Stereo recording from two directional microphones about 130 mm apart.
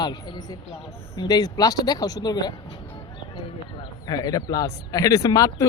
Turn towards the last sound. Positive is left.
turn(degrees=25)  # may be behind; listen again after turning